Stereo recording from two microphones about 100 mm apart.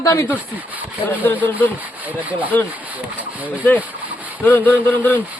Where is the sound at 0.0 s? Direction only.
30° left (ahead or behind).